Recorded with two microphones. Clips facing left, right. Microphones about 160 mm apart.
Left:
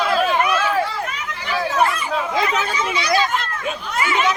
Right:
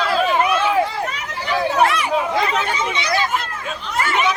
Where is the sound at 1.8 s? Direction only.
80° right.